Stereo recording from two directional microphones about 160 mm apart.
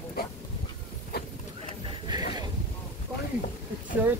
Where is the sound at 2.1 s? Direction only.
30° right (ahead or behind).